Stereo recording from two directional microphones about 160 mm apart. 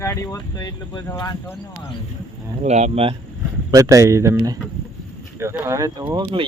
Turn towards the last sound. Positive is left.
turn(degrees=-30)  # may be behind; listen again after turning